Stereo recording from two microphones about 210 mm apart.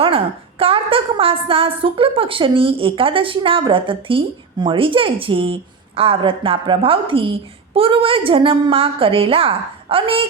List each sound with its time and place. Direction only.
0.6 s a woman's voice: 25° right (ahead or behind)